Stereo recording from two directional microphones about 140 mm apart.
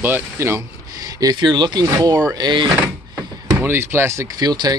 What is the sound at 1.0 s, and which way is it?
Speech, 30° right (ahead or behind).